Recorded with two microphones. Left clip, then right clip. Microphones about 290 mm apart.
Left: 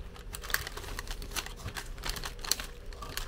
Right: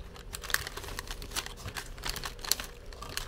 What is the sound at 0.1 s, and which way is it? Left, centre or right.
Typing, centre.